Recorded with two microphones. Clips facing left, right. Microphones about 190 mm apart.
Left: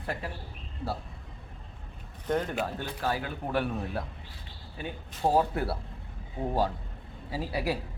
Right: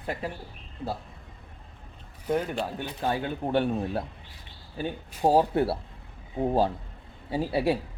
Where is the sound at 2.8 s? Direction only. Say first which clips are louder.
Right 3 dB; 20° right (ahead or behind).